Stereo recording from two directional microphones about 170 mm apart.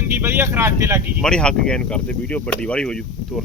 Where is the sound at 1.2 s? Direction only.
5° left (ahead or behind).